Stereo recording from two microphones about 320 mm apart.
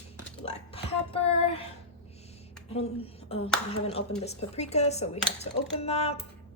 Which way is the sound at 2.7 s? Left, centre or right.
Centre.